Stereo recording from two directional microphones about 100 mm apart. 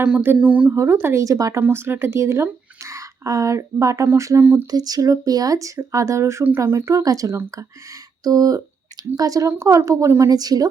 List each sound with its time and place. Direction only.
0.0 s speech: 15° right (ahead or behind)
0.8 s speech: 25° right (ahead or behind)
1.6 s speech: 20° right (ahead or behind)
4.7 s speech: 40° right (ahead or behind)